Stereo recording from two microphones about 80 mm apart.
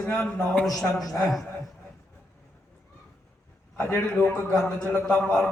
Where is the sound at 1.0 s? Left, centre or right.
Left.